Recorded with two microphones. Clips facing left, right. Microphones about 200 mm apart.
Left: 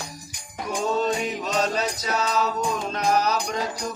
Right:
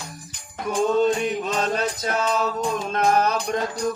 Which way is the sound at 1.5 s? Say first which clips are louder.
Right 1 dB; 50° right (ahead or behind).